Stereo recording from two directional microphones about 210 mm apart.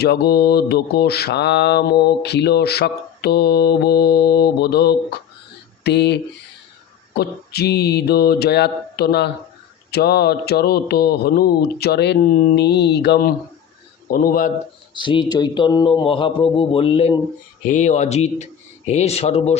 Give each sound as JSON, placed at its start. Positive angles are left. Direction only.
{"t": 0.0, "sound": "mantra", "side_deg": 50}
{"t": 14.9, "sound": "a man's voice", "side_deg": 20}